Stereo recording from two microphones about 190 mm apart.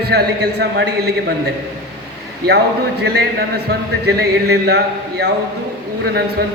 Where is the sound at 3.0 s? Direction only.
60° right (ahead or behind).